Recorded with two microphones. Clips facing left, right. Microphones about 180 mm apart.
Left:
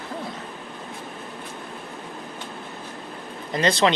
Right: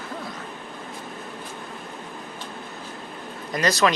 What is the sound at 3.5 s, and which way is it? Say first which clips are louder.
Speech: left 1 dB; 25° left (ahead or behind).